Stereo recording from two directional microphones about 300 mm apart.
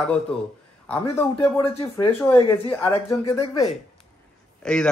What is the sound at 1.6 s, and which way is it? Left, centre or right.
Speech, centre.